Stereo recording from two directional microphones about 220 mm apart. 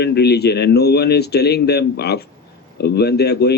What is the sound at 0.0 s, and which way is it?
A man's voice, 50° left (ahead or behind).